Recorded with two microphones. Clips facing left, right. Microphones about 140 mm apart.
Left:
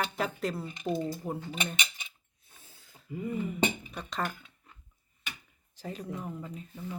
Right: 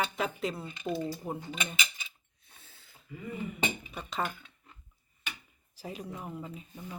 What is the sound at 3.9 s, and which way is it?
Speech, 5° right (ahead or behind).